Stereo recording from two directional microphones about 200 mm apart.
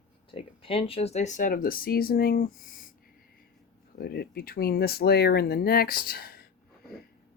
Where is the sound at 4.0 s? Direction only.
50° left (ahead or behind).